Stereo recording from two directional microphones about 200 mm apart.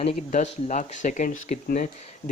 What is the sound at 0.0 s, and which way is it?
Speech, 35° left (ahead or behind).